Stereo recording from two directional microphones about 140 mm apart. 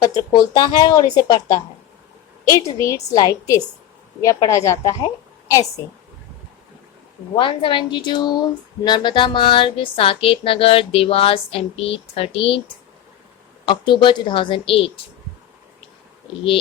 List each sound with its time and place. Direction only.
0.0 s a woman's voice: 25° left (ahead or behind)
7.3 s speech: 35° left (ahead or behind)